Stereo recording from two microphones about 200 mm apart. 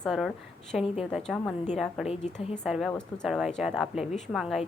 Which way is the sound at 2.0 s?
30° left (ahead or behind).